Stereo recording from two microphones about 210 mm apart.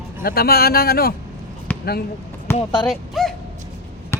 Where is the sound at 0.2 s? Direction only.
45° left (ahead or behind).